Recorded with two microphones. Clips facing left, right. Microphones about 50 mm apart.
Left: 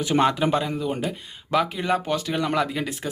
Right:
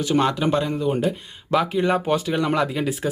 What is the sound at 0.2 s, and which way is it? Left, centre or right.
Speech, centre.